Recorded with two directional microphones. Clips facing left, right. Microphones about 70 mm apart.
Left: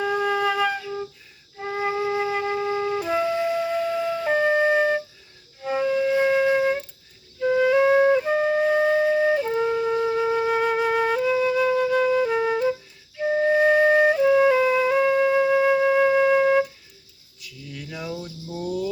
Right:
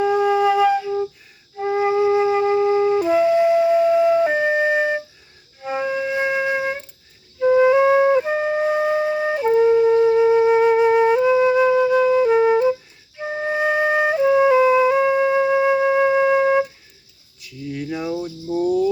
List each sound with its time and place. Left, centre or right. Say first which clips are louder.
0.0 s flute: right 6 dB; centre
17.4 s a sound: right 10 dB; right
18.5 s cricket: right 11 dB; right